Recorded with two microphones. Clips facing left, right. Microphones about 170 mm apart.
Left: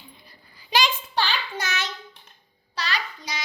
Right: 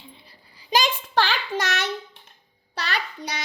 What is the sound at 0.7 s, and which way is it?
Child singing, 45° right (ahead or behind).